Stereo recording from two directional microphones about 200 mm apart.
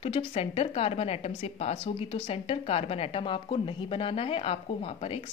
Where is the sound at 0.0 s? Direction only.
30° left (ahead or behind).